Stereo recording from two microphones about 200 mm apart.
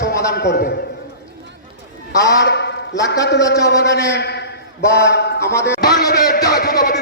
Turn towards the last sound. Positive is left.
turn(degrees=55)  # may be behind; listen again after turning